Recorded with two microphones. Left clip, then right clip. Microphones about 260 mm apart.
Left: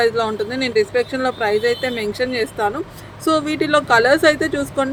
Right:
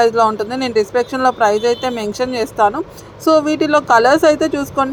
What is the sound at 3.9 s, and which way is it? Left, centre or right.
Speech, centre.